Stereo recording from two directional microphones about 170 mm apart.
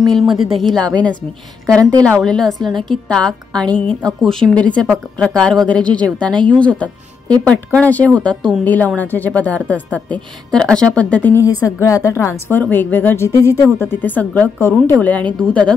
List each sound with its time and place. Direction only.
0.7 s a woman's voice: 5° left (ahead or behind)
1.8 s a woman's voice: 20° right (ahead or behind)
2.1 s a woman's voice: 5° left (ahead or behind)